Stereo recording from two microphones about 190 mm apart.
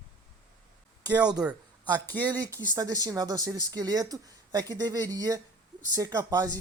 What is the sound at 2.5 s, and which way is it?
Speech, 20° right (ahead or behind).